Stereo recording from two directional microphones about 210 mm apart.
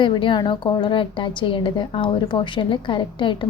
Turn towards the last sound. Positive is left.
turn(degrees=25)  # may be behind; listen again after turning